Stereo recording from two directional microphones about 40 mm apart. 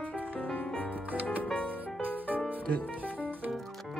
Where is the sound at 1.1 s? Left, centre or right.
Right.